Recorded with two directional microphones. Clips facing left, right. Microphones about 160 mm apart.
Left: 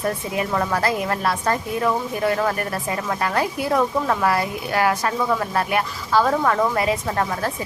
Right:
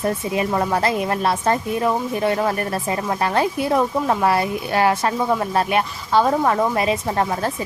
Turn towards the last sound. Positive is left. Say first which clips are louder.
# right 2 dB
turn(degrees=-25)  # may be behind; listen again after turning